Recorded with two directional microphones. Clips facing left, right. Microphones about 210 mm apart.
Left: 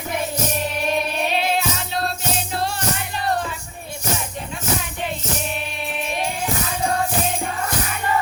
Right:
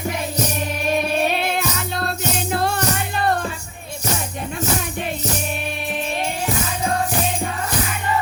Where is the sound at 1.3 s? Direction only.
55° right (ahead or behind).